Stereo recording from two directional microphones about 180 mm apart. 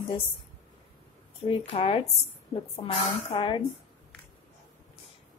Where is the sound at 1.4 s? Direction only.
30° left (ahead or behind).